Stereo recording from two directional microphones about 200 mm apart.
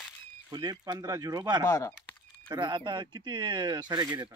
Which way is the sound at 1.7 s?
15° left (ahead or behind).